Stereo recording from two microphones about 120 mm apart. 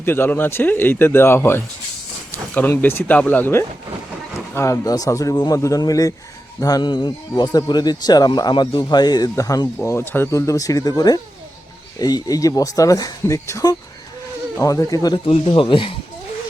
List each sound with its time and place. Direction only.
0.0 s speech: 20° left (ahead or behind)
15.3 s speech: 45° left (ahead or behind)